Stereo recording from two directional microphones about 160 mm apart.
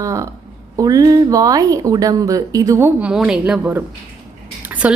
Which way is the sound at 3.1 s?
5° right (ahead or behind).